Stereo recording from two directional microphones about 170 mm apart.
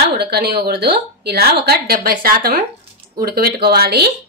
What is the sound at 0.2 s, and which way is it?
A woman's voice, 70° right (ahead or behind).